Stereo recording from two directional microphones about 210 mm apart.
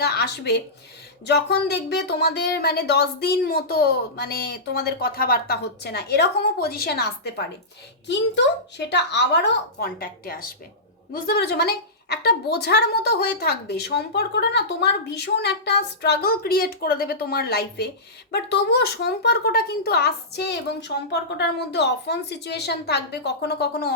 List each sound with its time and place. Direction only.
0.0 s a woman's voice: 50° left (ahead or behind)
8.9 s a woman's voice: 55° left (ahead or behind)